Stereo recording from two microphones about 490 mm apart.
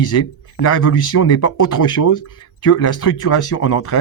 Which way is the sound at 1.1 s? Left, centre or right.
Left.